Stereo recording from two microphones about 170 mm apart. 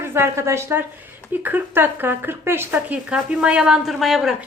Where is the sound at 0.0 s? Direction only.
15° right (ahead or behind).